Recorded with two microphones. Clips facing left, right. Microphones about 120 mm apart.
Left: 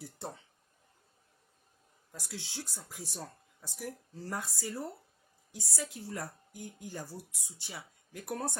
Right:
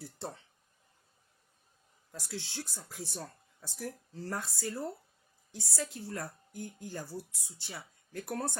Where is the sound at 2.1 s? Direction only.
10° left (ahead or behind).